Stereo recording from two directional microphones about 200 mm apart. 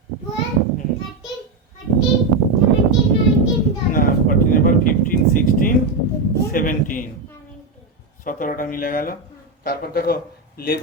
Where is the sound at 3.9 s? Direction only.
45° left (ahead or behind).